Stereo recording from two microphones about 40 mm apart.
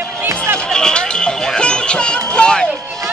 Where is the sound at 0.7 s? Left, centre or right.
Centre.